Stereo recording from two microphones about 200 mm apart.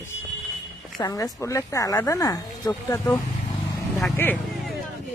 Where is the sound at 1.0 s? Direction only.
15° left (ahead or behind).